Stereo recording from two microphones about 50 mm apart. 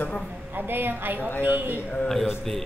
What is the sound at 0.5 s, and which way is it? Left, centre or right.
A woman's voice, right.